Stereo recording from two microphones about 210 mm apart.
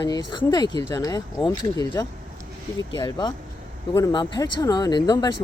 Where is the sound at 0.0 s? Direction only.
20° left (ahead or behind).